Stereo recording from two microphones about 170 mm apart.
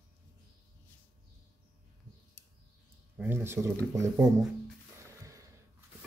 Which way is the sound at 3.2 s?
15° right (ahead or behind).